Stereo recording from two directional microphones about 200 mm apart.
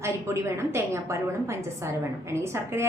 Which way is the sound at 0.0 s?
15° right (ahead or behind).